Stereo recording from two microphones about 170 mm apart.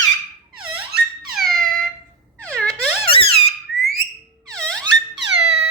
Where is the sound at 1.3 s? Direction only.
Centre (ahead or behind).